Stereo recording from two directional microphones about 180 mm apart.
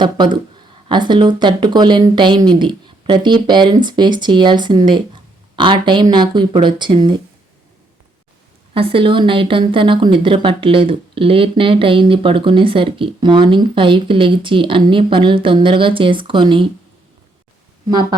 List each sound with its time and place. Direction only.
0.0 s a woman's voice: 25° right (ahead or behind)
8.7 s a woman's voice: 30° right (ahead or behind)